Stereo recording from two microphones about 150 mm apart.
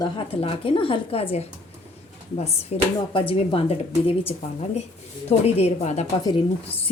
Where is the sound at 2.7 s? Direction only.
45° left (ahead or behind).